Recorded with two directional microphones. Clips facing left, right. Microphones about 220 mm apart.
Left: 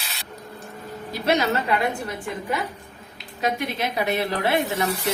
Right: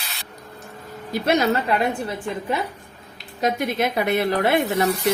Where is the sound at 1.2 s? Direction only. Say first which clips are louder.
Right 2 dB; 50° right (ahead or behind).